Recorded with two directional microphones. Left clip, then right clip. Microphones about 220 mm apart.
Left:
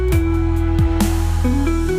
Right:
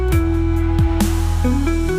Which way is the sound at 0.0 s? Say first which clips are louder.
Even; centre (ahead or behind).